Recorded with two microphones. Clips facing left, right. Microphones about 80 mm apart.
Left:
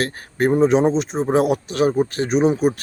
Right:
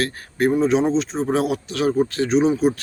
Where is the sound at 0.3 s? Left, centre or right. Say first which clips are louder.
Left 1 dB; left.